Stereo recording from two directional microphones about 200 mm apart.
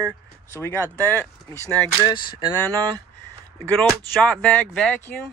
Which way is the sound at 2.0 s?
20° left (ahead or behind).